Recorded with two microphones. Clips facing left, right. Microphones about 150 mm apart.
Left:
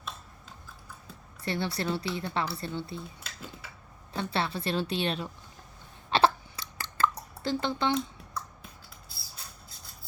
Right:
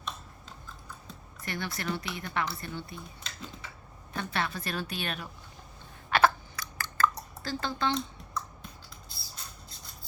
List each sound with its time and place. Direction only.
1.5 s speech: 30° left (ahead or behind)
3.2 s typing: 5° left (ahead or behind)
4.1 s speech: 30° left (ahead or behind)
6.1 s chewing: 30° left (ahead or behind)
7.9 s a sound: 10° left (ahead or behind)